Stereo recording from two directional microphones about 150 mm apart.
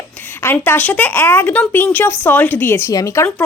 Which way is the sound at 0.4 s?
15° left (ahead or behind).